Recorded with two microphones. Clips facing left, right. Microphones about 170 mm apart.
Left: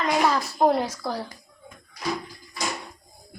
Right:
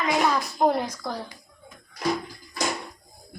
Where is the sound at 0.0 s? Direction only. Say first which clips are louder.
Left 1 dB; 5° left (ahead or behind).